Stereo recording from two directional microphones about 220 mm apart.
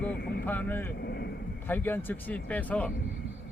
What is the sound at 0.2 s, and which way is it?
Vehicle, 45° left (ahead or behind).